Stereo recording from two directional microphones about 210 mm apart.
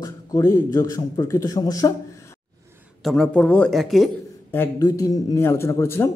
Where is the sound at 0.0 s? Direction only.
15° left (ahead or behind).